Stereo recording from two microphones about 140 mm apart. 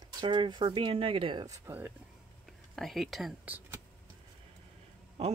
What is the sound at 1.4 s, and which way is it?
Speech, 20° right (ahead or behind).